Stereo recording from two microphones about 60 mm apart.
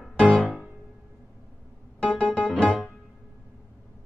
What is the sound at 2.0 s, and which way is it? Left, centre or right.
Music, left.